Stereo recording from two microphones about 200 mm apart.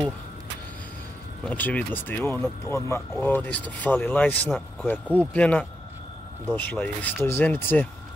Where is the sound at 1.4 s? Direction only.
5° left (ahead or behind).